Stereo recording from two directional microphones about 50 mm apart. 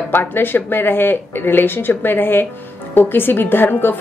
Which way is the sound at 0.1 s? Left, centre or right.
Left.